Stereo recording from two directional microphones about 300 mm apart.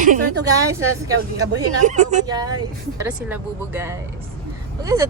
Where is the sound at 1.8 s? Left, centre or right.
Right.